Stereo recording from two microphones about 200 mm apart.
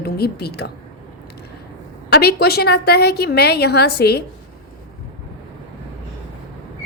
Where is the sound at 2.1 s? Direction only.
55° left (ahead or behind).